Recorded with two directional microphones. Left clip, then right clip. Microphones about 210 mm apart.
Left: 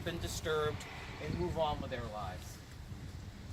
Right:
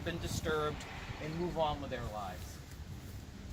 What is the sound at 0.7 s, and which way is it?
Vehicle, 45° right (ahead or behind).